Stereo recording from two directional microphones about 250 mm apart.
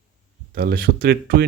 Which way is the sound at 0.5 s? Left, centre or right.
Right.